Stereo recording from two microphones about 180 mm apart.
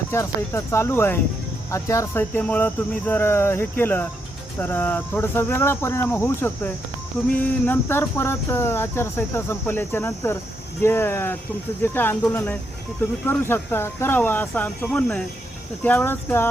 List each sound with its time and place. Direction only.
0.1 s speech: 15° left (ahead or behind)